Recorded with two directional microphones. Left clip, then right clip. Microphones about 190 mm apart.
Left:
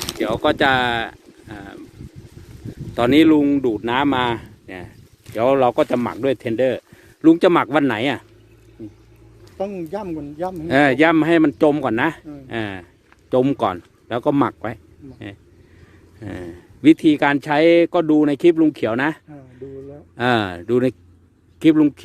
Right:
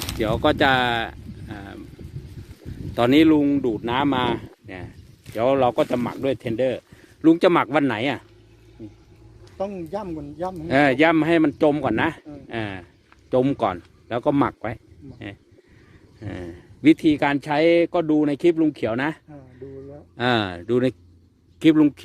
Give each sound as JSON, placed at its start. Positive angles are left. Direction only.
{"t": 0.0, "sound": "a sound", "side_deg": -5}
{"t": 2.9, "sound": "speech", "side_deg": 0}
{"t": 9.6, "sound": "speech", "side_deg": 50}
{"t": 10.7, "sound": "speech", "side_deg": 10}
{"t": 16.2, "sound": "speech", "side_deg": 5}